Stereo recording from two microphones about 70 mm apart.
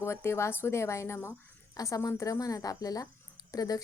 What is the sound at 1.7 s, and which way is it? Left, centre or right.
A woman's voice, left.